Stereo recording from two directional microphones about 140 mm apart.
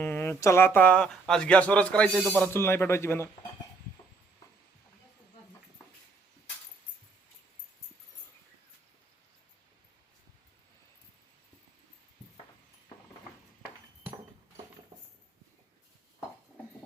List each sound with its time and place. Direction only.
0.0 s speech: 15° left (ahead or behind)